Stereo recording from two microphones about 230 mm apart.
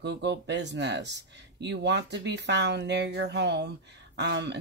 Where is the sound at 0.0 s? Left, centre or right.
Right.